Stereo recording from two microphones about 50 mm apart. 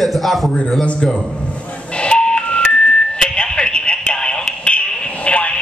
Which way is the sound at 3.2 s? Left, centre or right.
Centre.